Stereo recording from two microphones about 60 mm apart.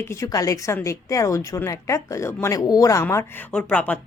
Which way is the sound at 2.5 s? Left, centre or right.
Left.